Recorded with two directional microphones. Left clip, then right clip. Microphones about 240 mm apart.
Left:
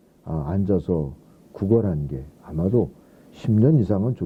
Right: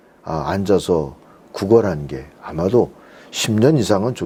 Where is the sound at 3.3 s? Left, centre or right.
Centre.